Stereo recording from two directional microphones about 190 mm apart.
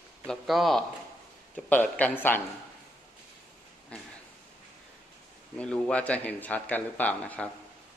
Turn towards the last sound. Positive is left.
turn(degrees=5)  # may be behind; listen again after turning